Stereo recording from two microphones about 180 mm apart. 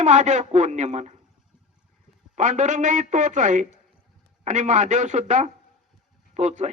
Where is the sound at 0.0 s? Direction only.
40° right (ahead or behind).